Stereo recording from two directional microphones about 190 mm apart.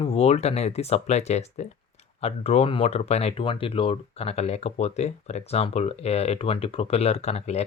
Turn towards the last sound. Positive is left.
turn(degrees=35)  # may be behind; listen again after turning